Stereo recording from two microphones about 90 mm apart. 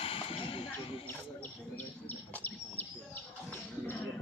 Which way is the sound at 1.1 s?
20° left (ahead or behind).